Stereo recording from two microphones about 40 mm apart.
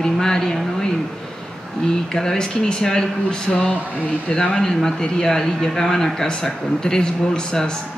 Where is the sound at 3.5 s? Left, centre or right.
Left.